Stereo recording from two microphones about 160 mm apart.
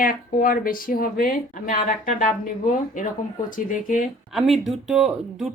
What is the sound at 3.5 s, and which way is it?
Speech, 55° left (ahead or behind).